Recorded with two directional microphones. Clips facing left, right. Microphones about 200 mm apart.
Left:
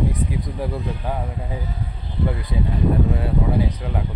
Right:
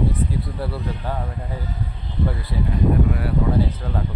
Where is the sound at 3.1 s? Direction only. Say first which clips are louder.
Even; 25° left (ahead or behind).